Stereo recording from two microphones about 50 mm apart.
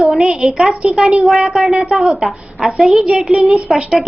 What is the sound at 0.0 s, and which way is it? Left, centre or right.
A woman's voice, centre.